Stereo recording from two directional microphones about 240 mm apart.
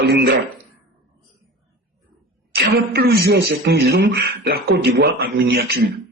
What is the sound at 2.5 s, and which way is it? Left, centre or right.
A man's voice, right.